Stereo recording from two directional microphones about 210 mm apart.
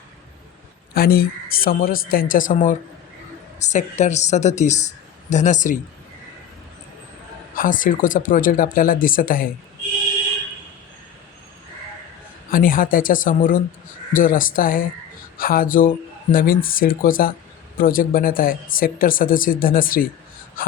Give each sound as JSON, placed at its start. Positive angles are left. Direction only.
{"t": 0.9, "sound": "speech", "side_deg": 45}
{"t": 7.5, "sound": "speech", "side_deg": 40}
{"t": 12.5, "sound": "speech", "side_deg": 40}